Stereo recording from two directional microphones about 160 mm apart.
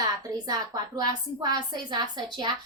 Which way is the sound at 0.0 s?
25° right (ahead or behind).